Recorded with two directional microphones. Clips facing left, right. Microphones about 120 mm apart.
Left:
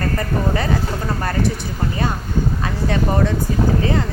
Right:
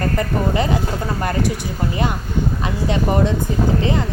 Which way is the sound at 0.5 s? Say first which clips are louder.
Right 1 dB; 20° right (ahead or behind).